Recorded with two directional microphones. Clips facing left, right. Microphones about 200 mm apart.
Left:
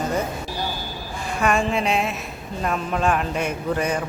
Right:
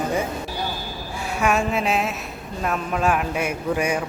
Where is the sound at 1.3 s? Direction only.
5° right (ahead or behind).